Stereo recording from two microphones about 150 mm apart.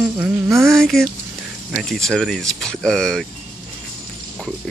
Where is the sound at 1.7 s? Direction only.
Centre (ahead or behind).